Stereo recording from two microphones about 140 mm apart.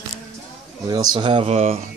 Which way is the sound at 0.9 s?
30° right (ahead or behind).